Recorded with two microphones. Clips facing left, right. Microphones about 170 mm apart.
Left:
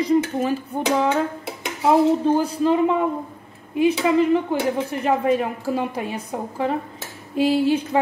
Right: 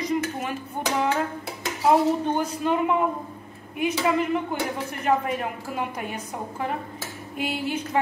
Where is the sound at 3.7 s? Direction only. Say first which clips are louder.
Left 6 dB; 30° left (ahead or behind).